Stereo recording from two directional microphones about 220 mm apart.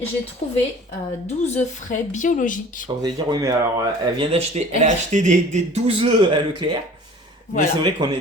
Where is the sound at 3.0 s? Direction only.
20° right (ahead or behind).